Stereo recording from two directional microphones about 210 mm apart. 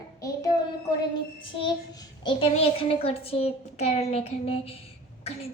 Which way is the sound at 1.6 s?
20° left (ahead or behind).